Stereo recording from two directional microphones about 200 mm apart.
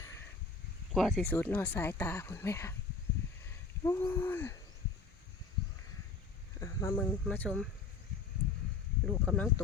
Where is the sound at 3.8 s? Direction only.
15° left (ahead or behind).